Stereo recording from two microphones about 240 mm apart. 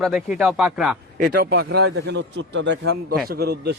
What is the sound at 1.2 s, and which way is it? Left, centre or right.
A man's voice, right.